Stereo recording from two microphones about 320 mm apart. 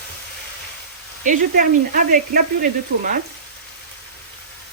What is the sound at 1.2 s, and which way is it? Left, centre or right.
Speech, right.